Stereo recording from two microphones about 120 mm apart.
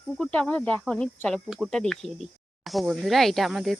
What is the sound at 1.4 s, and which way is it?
Speech, 5° right (ahead or behind).